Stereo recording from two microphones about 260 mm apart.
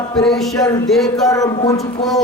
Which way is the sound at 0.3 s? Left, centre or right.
Centre.